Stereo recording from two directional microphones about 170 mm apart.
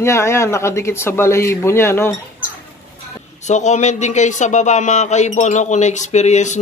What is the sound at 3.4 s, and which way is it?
Speech, 45° left (ahead or behind).